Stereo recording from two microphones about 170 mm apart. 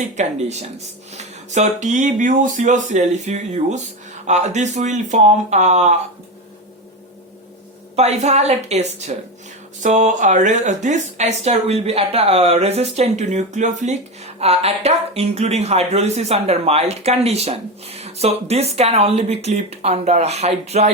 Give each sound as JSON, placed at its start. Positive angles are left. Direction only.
{"t": 0.2, "sound": "speech", "side_deg": -40}
{"t": 7.9, "sound": "speech", "side_deg": -40}